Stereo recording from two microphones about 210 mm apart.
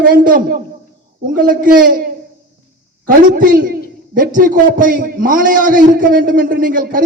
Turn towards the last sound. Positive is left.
turn(degrees=-40)  # may be behind; listen again after turning